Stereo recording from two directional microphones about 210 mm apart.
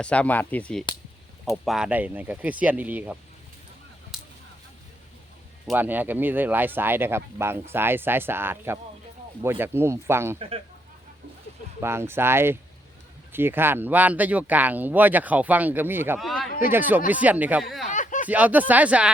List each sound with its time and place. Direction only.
0.0 s speech: 5° left (ahead or behind)
4.1 s a sound: centre (ahead or behind)
5.6 s speech: 10° right (ahead or behind)
11.8 s speech: 10° right (ahead or behind)
16.5 s speech: 40° left (ahead or behind)
17.1 s speech: 5° right (ahead or behind)
17.9 s a sound: 35° left (ahead or behind)
18.3 s speech: 5° right (ahead or behind)